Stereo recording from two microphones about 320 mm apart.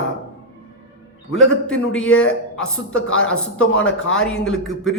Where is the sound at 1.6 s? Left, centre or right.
Centre.